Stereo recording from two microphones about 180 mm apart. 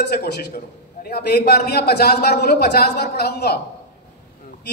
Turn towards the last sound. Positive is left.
turn(degrees=65)  # may be behind; listen again after turning